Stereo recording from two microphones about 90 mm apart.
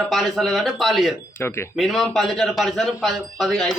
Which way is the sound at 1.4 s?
25° left (ahead or behind).